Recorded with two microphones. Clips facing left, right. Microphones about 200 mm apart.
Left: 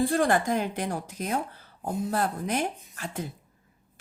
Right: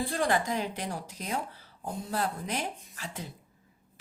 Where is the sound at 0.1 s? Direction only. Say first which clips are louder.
Left 5 dB; 50° left (ahead or behind).